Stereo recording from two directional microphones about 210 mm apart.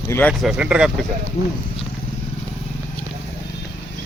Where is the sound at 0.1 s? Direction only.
5° left (ahead or behind).